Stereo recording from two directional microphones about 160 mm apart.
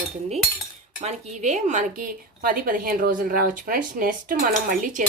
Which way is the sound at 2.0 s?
65° right (ahead or behind).